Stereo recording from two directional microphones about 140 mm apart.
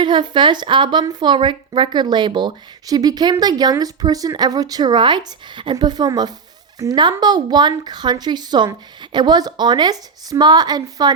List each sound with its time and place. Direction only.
0.0 s a woman's voice: 35° right (ahead or behind)